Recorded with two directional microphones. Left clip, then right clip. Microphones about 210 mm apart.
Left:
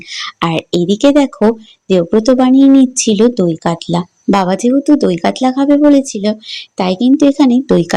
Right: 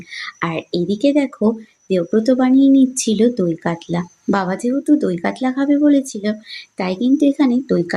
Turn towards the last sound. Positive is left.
turn(degrees=30)  # may be behind; listen again after turning